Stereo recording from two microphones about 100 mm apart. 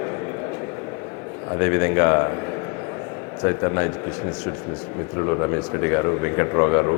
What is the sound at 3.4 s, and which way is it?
Speech, 30° left (ahead or behind).